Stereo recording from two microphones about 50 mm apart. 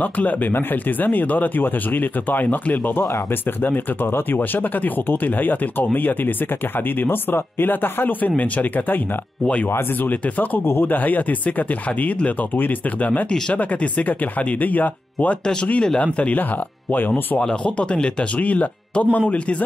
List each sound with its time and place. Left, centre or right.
0.0 s speech: left
3.6 s speech: left
10.0 s speech: left; by 18.1 s centre
18.4 s speech: left